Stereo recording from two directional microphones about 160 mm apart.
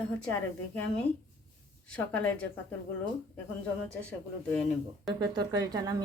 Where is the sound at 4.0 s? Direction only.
10° left (ahead or behind).